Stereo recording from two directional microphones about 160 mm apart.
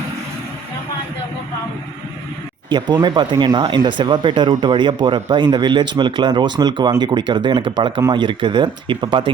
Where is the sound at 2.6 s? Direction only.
25° right (ahead or behind).